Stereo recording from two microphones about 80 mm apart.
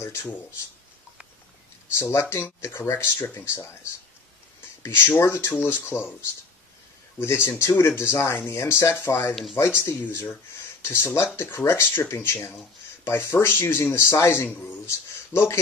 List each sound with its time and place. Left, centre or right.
0.0 s speech: left
2.0 s speech: left
7.2 s speech: left
9.3 s speech: centre
9.8 s speech: left